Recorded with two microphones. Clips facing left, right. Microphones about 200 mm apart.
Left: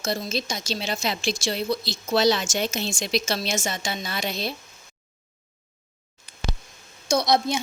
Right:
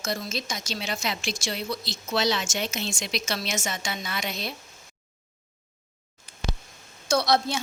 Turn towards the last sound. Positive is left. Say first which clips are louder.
# left 2 dB
turn(degrees=15)  # may be behind; listen again after turning